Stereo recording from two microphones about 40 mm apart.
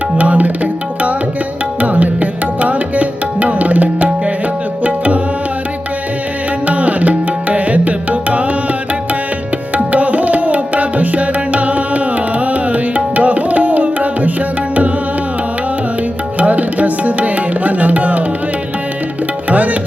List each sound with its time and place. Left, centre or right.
0.2 s tabla: right
1.8 s music: right
4.8 s tabla: right
6.7 s music: right
9.7 s tabla: right
16.4 s tabla: right
19.5 s tabla: right